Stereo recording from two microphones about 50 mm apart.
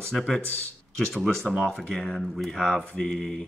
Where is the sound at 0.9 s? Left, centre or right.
Centre.